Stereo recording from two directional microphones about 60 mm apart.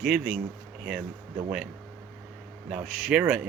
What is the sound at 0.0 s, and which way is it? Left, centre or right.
Speech, centre.